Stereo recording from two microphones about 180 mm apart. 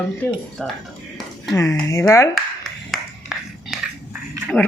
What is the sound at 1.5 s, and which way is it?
Speech, 15° left (ahead or behind).